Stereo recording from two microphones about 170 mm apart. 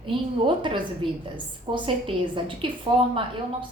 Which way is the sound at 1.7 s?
30° right (ahead or behind).